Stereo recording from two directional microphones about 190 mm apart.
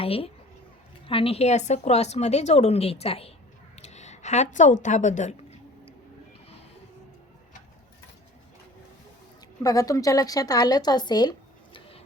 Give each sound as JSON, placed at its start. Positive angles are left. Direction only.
{"t": 0.0, "sound": "a woman's voice", "side_deg": 30}
{"t": 3.8, "sound": "a sound", "side_deg": 35}
{"t": 9.6, "sound": "speech", "side_deg": 20}